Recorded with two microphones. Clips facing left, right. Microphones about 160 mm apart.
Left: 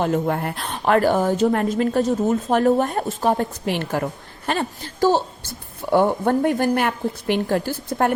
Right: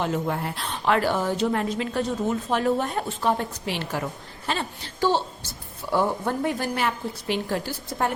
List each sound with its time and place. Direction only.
0.0 s a woman's voice: 50° left (ahead or behind)